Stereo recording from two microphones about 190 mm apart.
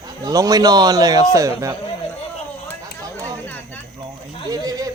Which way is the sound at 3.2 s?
10° left (ahead or behind).